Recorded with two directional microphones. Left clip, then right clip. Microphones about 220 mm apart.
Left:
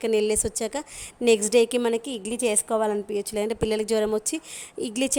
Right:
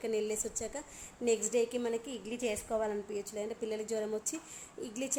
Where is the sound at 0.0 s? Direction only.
45° left (ahead or behind).